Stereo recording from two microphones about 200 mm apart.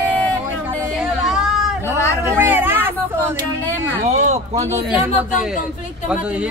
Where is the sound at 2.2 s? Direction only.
10° right (ahead or behind).